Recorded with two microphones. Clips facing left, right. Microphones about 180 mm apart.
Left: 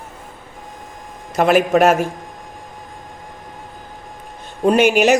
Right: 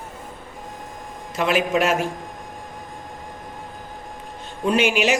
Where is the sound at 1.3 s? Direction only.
45° left (ahead or behind).